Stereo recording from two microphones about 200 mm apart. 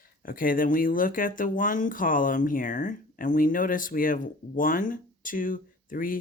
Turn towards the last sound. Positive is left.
turn(degrees=45)  # may be behind; listen again after turning